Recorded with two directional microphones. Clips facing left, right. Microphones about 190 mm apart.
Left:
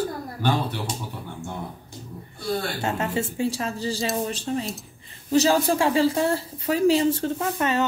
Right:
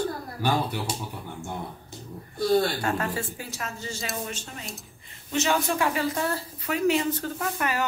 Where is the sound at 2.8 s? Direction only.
25° left (ahead or behind).